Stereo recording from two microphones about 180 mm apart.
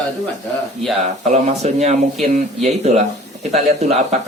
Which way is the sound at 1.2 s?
40° right (ahead or behind).